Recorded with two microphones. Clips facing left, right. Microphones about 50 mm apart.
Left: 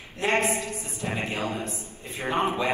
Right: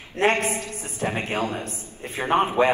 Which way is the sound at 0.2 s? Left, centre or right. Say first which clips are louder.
Right 3 dB; right.